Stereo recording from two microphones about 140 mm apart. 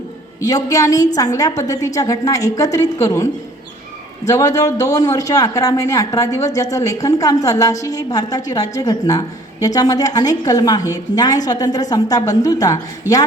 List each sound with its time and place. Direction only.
0.4 s a man's voice: 25° left (ahead or behind)
4.3 s a man's voice: 25° left (ahead or behind)